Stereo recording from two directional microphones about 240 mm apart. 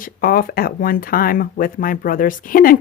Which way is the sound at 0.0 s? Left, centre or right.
Left.